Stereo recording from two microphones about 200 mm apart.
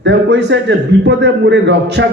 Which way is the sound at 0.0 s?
60° right (ahead or behind).